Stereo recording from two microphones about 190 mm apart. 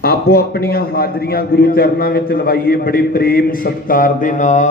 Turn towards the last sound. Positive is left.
turn(degrees=40)  # may be behind; listen again after turning